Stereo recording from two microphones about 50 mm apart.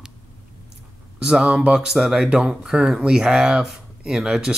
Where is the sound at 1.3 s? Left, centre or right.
Centre.